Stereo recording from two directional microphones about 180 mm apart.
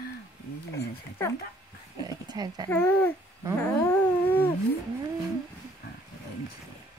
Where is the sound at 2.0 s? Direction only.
20° right (ahead or behind).